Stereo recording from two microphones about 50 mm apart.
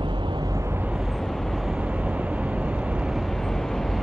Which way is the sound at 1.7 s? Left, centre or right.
Right.